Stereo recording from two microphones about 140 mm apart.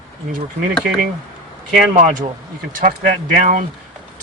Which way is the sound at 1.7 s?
65° right (ahead or behind).